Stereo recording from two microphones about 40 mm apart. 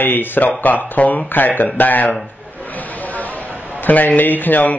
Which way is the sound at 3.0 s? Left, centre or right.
Left.